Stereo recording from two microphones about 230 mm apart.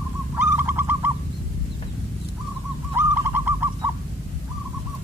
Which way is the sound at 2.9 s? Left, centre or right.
Centre.